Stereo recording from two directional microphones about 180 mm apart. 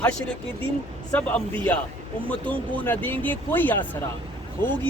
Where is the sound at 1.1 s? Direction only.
10° left (ahead or behind).